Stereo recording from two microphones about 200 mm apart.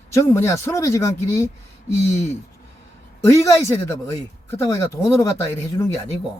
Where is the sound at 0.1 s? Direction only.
15° left (ahead or behind).